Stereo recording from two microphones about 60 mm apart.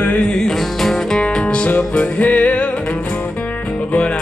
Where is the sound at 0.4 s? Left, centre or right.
Centre.